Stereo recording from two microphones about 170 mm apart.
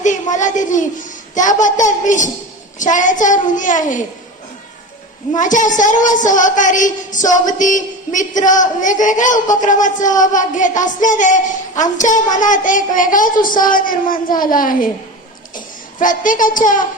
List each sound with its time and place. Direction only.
0.0 s a woman's voice: 45° left (ahead or behind)
5.3 s a woman's voice: 50° left (ahead or behind)